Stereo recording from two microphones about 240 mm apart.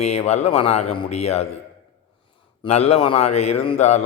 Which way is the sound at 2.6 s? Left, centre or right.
Left.